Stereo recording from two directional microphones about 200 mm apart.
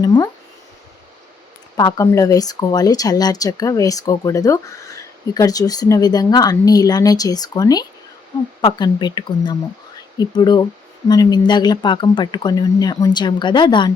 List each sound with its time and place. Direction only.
0.0 s speech: 20° left (ahead or behind)
1.7 s speech: 20° left (ahead or behind)